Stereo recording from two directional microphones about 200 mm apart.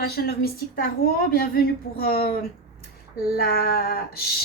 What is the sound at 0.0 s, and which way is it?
A woman's voice, 50° left (ahead or behind).